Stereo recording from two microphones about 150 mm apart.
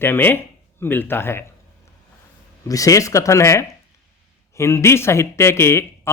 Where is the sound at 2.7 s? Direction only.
20° left (ahead or behind).